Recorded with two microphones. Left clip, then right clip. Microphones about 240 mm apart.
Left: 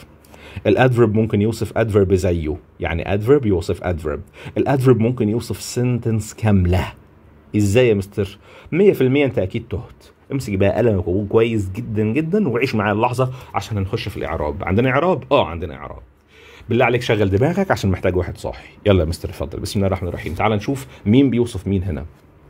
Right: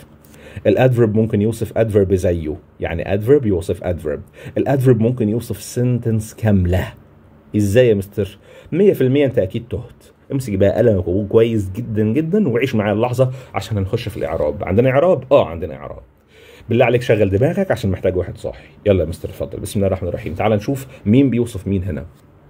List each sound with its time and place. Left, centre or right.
0.5 s speech: centre